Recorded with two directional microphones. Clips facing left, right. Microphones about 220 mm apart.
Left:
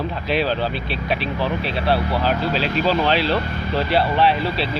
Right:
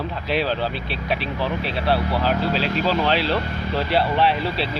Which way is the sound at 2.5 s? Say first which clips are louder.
Left 1 dB; 40° right (ahead or behind).